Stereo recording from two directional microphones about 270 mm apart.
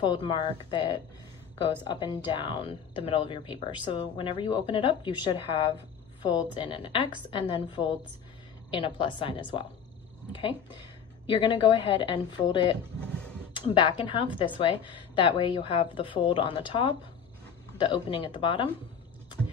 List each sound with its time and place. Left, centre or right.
0.0 s a woman's voice: centre